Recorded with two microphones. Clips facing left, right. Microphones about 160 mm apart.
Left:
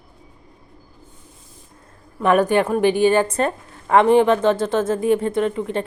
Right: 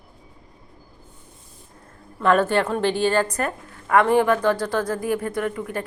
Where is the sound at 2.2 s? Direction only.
15° left (ahead or behind).